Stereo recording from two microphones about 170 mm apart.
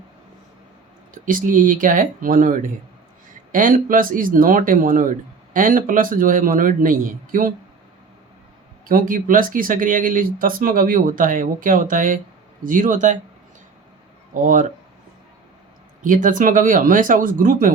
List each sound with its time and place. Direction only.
1.1 s speech: 50° right (ahead or behind)
8.9 s speech: 55° right (ahead or behind)
14.4 s speech: 50° right (ahead or behind)
16.0 s speech: 50° right (ahead or behind)